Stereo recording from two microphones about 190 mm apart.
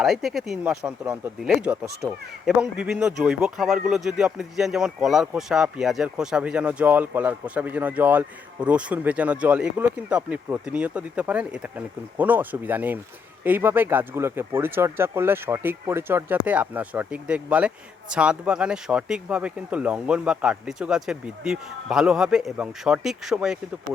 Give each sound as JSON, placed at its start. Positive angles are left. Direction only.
{"t": 0.0, "sound": "speech", "side_deg": 0}